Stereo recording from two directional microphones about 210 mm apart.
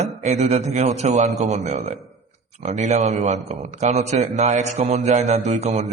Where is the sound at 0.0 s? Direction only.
35° right (ahead or behind).